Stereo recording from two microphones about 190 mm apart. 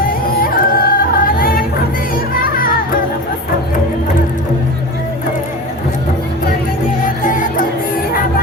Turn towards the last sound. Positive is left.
turn(degrees=45)  # may be behind; listen again after turning